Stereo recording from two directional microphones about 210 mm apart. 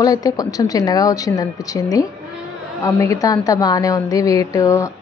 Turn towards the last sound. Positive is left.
turn(degrees=15)  # may be behind; listen again after turning